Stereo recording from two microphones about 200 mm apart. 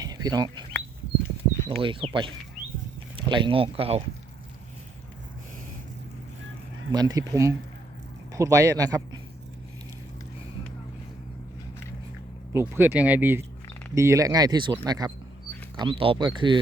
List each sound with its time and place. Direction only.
0.0 s bird: 20° right (ahead or behind)
1.6 s speech: 25° right (ahead or behind)
6.9 s speech: 20° right (ahead or behind)
12.5 s speech: 10° right (ahead or behind)